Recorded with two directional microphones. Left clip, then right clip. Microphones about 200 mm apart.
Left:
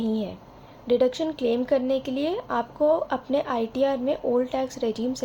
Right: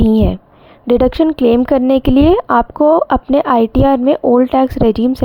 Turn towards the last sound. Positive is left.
turn(degrees=-50)  # may be behind; listen again after turning